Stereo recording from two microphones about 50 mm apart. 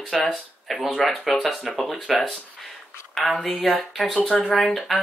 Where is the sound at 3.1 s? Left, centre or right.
Centre.